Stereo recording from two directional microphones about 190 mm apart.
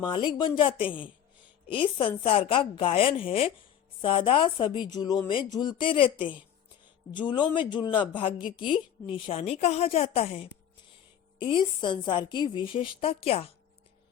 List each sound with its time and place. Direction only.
0.0 s a woman's voice: 25° left (ahead or behind)